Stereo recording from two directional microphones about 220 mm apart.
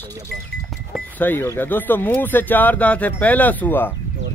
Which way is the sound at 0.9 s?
10° left (ahead or behind).